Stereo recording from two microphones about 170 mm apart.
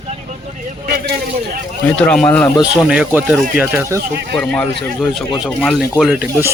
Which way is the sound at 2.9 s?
5° right (ahead or behind).